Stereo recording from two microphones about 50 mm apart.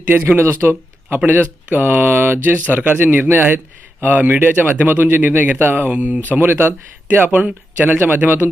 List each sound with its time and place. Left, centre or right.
0.1 s speech: right
1.2 s speech: right
7.3 s speech: right
7.9 s speech: right